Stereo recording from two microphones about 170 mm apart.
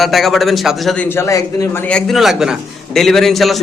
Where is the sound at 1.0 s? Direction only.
15° left (ahead or behind).